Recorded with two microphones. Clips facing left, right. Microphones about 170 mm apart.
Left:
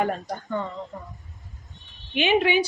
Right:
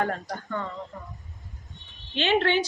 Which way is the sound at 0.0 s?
15° left (ahead or behind).